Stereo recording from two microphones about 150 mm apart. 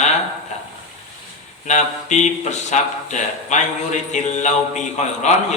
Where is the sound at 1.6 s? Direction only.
55° left (ahead or behind).